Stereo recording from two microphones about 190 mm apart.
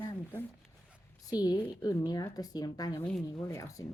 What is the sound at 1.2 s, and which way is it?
Speech, 20° left (ahead or behind).